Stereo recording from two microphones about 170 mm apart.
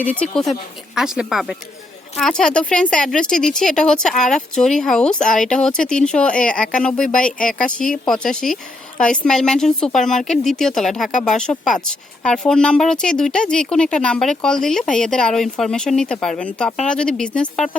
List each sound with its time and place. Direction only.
0.0 s speech: 10° left (ahead or behind)